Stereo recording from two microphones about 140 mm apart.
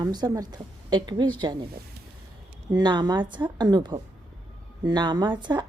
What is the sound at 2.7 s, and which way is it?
A woman's voice, 30° right (ahead or behind).